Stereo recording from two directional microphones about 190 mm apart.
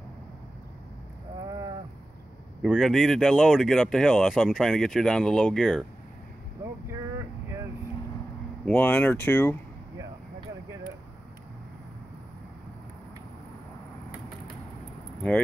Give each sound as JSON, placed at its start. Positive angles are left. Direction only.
{"t": 1.4, "sound": "a sound", "side_deg": -20}
{"t": 2.6, "sound": "speech", "side_deg": 0}
{"t": 6.6, "sound": "vehicle", "side_deg": -15}
{"t": 8.6, "sound": "speech", "side_deg": 5}